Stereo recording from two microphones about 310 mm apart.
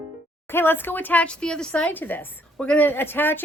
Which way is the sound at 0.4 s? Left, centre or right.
Centre.